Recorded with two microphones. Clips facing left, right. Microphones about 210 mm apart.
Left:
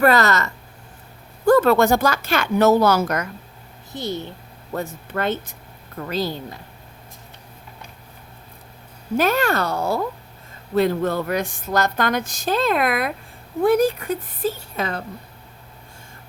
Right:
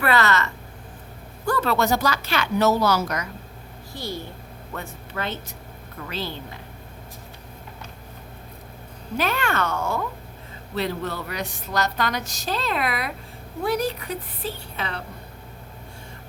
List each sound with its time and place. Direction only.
0.0 s speech: 40° left (ahead or behind)
3.9 s a child's voice: 20° left (ahead or behind)
5.1 s speech: 50° left (ahead or behind)
6.0 s speech: 40° left (ahead or behind)
9.1 s speech: 45° left (ahead or behind)
10.8 s speech: 50° left (ahead or behind)